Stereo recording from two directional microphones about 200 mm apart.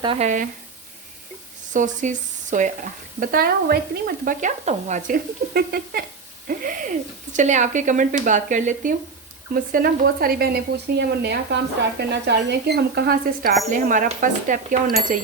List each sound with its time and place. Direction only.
0.0 s speech: 25° right (ahead or behind)
1.7 s speech: 40° right (ahead or behind)